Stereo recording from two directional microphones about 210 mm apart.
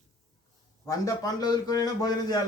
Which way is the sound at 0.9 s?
15° left (ahead or behind).